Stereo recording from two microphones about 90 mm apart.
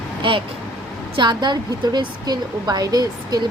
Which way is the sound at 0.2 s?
70° right (ahead or behind).